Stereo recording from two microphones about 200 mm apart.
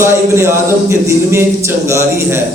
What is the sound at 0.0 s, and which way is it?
Speech, 10° right (ahead or behind).